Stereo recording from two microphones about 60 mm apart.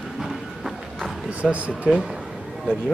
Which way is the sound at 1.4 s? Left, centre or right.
Right.